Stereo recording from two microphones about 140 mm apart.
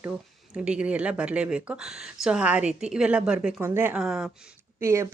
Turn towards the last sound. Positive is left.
turn(degrees=-20)  # may be behind; listen again after turning